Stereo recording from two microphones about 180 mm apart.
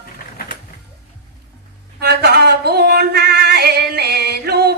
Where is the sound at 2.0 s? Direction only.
65° right (ahead or behind).